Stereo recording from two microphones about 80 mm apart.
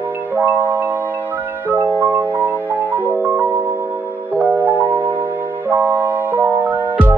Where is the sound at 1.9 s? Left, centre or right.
Right.